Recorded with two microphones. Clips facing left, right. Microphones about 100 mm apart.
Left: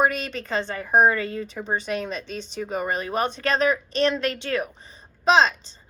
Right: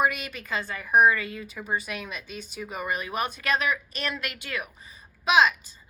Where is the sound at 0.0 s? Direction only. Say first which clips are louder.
Left 3 dB; 30° left (ahead or behind).